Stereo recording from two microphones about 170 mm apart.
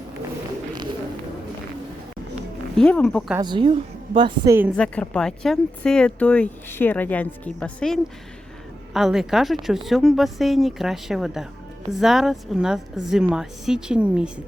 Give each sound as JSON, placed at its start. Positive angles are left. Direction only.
{"t": 2.7, "sound": "speech", "side_deg": 5}
{"t": 3.4, "sound": "a woman's voice", "side_deg": -30}
{"t": 4.8, "sound": "speech", "side_deg": 5}